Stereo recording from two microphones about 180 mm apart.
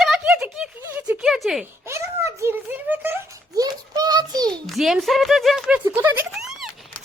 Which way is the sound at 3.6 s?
20° right (ahead or behind).